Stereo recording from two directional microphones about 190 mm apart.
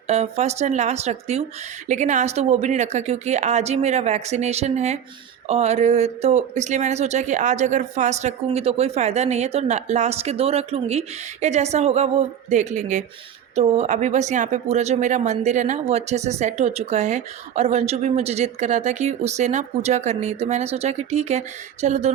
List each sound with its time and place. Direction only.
0.1 s speech: 35° right (ahead or behind)